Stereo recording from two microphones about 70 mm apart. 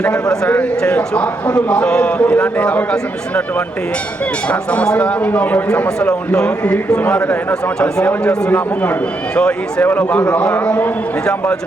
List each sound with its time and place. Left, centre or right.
0.0 s a man's voice: centre
4.4 s a man's voice: centre
8.4 s speech: left
9.8 s speech: left